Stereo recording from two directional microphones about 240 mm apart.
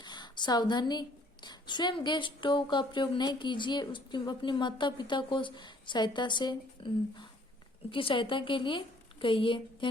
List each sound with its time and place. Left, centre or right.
0.0 s speech: centre